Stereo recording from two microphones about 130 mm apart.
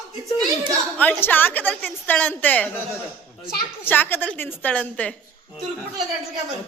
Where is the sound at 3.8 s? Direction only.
15° left (ahead or behind).